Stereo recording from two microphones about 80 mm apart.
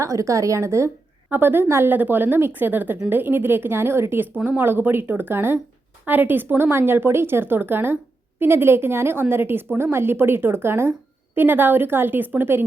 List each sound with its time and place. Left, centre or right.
0.0 s a woman's voice: right
1.3 s a woman's voice: right